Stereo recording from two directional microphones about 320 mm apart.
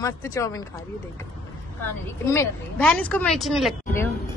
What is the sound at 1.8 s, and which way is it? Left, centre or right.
A woman's voice, centre.